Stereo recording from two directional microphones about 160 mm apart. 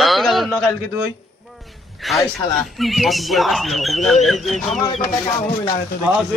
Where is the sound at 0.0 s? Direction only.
Centre (ahead or behind).